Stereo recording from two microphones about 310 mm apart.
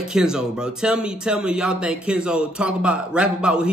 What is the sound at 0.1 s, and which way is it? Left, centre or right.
A man's voice, centre.